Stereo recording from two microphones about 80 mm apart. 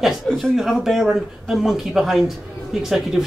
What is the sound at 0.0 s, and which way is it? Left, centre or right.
A man's voice, centre.